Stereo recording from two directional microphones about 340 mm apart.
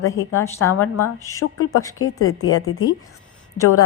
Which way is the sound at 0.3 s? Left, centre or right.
Centre.